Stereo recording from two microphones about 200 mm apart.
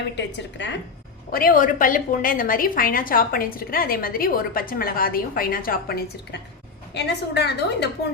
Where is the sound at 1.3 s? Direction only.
45° left (ahead or behind).